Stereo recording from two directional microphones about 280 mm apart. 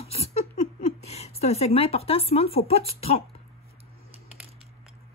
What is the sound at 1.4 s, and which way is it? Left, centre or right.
Speech, left.